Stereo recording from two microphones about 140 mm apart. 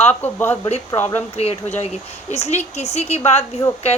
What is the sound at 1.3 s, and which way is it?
Speech, 50° left (ahead or behind).